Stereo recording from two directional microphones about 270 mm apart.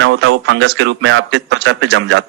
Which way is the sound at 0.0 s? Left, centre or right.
Right.